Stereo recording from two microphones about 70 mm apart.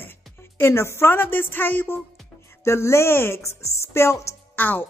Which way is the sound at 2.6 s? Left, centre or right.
Left.